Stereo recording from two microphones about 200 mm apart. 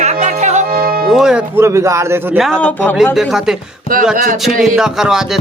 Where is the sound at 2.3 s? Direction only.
Centre (ahead or behind).